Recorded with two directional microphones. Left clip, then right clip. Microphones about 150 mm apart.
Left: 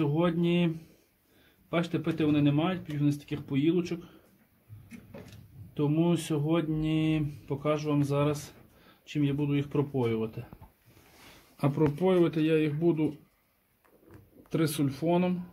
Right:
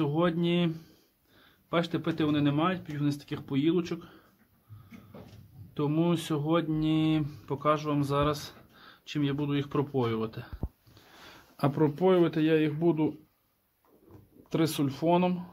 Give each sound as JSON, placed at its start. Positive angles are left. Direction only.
{"t": 0.0, "sound": "speech", "side_deg": -5}
{"t": 5.8, "sound": "speech", "side_deg": 0}
{"t": 11.5, "sound": "speech", "side_deg": -5}
{"t": 14.5, "sound": "speech", "side_deg": -5}